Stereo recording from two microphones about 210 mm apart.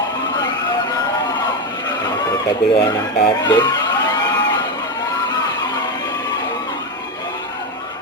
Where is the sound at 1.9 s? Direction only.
20° left (ahead or behind).